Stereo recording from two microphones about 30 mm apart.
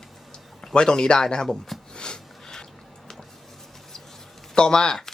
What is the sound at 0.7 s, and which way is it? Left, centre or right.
Speech, left.